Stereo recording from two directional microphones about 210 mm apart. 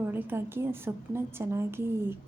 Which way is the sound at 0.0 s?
10° right (ahead or behind).